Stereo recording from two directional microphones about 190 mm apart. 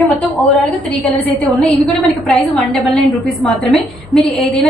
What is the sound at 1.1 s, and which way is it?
A woman's voice, 5° left (ahead or behind).